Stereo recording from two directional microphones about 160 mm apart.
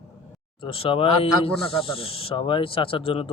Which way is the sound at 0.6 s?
35° left (ahead or behind).